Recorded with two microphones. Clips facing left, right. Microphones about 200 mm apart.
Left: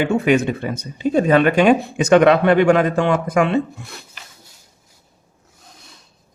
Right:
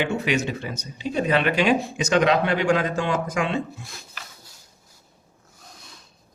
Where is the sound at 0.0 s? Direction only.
50° left (ahead or behind).